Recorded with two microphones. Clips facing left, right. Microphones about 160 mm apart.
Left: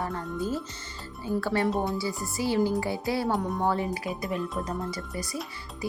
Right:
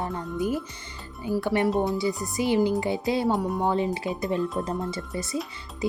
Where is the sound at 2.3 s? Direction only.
20° right (ahead or behind).